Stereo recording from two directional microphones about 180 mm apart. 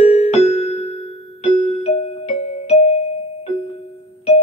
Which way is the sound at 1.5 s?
35° left (ahead or behind).